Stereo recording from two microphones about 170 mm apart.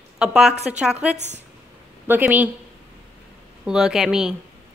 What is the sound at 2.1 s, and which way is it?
Speech, 10° right (ahead or behind).